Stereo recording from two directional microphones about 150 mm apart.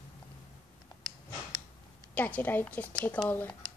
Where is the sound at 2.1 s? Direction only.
10° left (ahead or behind).